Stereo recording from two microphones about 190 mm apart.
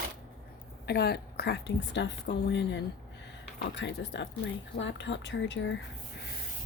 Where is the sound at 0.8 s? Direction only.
60° left (ahead or behind).